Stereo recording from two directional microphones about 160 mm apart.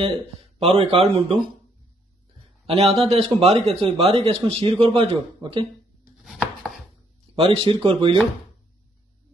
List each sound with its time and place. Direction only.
0.6 s a man's voice: 35° right (ahead or behind)
2.6 s a man's voice: 35° right (ahead or behind)
6.2 s chopping: centre (ahead or behind)
7.3 s a man's voice: 35° right (ahead or behind)